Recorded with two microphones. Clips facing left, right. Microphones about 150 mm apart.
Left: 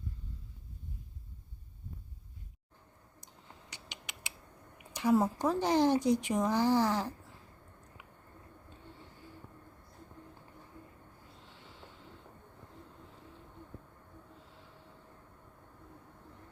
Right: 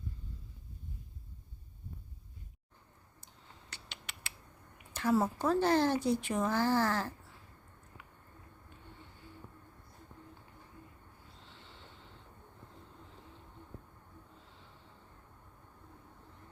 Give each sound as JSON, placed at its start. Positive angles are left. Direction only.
{"t": 3.7, "sound": "rodents", "side_deg": 15}
{"t": 4.9, "sound": "speech", "side_deg": 15}
{"t": 11.4, "sound": "a sound", "side_deg": 10}